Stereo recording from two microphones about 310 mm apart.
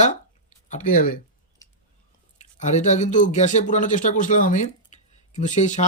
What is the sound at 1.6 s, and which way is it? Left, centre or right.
Chewing, centre.